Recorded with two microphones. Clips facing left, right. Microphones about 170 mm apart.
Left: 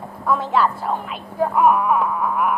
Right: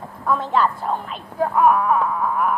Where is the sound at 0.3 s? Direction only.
5° left (ahead or behind).